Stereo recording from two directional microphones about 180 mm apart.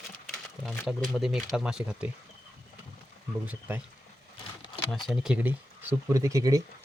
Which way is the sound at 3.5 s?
10° right (ahead or behind).